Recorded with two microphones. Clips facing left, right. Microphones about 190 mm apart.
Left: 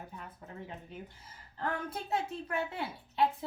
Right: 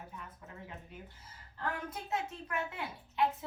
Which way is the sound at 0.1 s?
35° left (ahead or behind).